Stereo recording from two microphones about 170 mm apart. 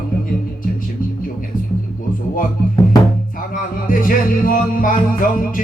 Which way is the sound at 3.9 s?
55° left (ahead or behind).